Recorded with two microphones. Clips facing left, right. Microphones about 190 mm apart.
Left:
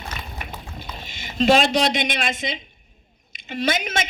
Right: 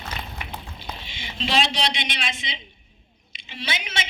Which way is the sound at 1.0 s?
45° left (ahead or behind).